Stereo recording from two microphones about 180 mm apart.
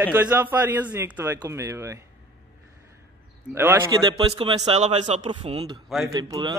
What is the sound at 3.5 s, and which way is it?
Speech, 15° right (ahead or behind).